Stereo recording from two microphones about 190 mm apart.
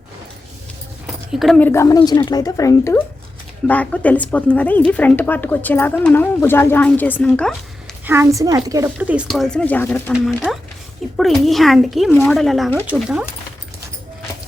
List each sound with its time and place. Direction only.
1.3 s a woman's voice: centre (ahead or behind)
8.0 s speech: 10° right (ahead or behind)